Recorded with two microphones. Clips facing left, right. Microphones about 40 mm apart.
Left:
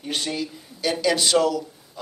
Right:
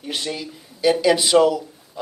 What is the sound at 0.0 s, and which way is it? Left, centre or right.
Speech, centre.